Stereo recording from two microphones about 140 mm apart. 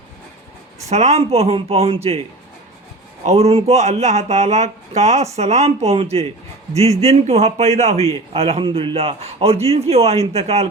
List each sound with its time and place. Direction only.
0.9 s speech: 50° right (ahead or behind)
3.2 s speech: 50° right (ahead or behind)